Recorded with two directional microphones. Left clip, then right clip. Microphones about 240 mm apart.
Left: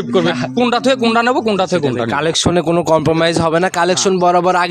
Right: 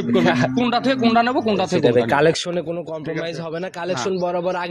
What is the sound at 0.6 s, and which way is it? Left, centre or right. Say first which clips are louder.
Speech: left 6 dB; left.